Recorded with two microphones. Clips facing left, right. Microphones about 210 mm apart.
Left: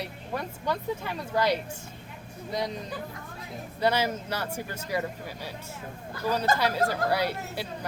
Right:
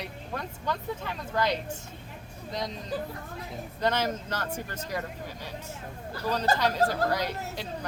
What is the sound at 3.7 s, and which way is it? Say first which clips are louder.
A woman's voice: left 2 dB; 10° left (ahead or behind).